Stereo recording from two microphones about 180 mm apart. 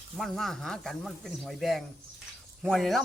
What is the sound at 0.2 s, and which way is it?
Speech, centre (ahead or behind).